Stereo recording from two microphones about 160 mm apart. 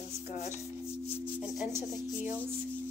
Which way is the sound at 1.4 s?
Centre (ahead or behind).